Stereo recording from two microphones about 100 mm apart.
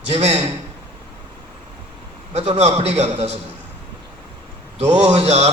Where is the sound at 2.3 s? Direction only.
90° right.